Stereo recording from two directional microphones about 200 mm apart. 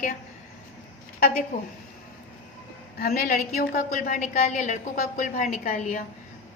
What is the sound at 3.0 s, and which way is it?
A woman's voice, 50° left (ahead or behind).